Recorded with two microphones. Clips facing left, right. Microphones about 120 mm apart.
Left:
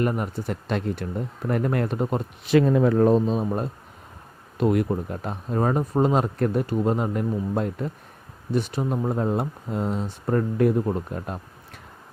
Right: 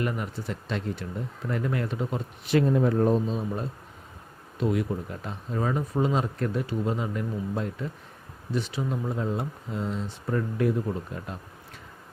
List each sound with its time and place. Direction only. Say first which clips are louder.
0.0 s speech: left 5 dB; 45° left (ahead or behind)
2.5 s speech: left 4 dB; 90° left; by 11.3 s 50° left (ahead or behind)